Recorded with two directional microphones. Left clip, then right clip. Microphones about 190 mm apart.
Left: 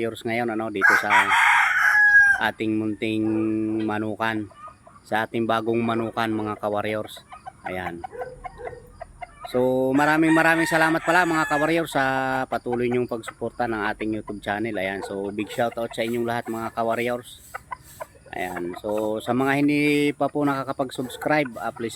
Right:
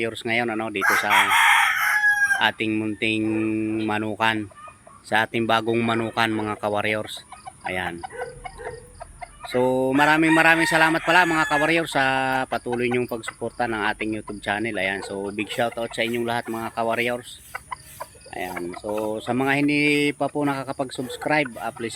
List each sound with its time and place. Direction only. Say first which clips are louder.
0.0 s speech: right 2 dB; 10° left (ahead or behind)
1.0 s chicken: even; 10° right (ahead or behind)
2.4 s speech: right 2 dB; 10° left (ahead or behind)
9.5 s speech: even; centre (ahead or behind)
17.5 s chicken: right 1 dB; 20° left (ahead or behind)
18.3 s speech: left 1 dB; 5° left (ahead or behind)